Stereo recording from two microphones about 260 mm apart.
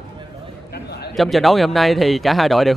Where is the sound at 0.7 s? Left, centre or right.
Left.